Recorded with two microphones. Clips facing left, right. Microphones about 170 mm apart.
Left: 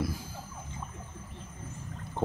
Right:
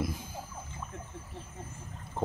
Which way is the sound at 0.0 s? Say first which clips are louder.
Left 1 dB; 20° right (ahead or behind).